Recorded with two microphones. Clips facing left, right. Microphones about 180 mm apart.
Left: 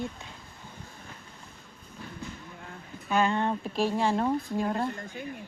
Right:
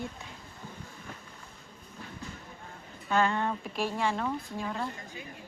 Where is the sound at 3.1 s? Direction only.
15° left (ahead or behind); by 4.3 s 35° left (ahead or behind).